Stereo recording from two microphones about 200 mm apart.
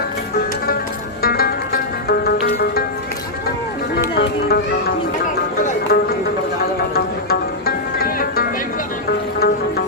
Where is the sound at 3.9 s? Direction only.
55° left (ahead or behind).